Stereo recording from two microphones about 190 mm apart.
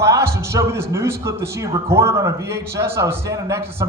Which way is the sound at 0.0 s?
15° right (ahead or behind).